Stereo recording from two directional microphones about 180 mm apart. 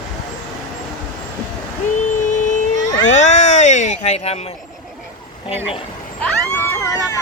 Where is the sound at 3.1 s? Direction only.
40° left (ahead or behind).